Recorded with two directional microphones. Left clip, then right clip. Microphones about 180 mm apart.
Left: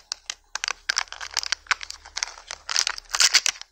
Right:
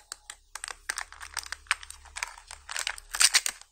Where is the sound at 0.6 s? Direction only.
25° left (ahead or behind).